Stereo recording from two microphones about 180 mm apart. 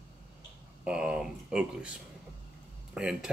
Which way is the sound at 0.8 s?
5° right (ahead or behind).